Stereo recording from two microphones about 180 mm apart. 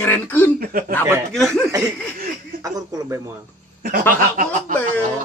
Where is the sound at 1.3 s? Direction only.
Centre (ahead or behind).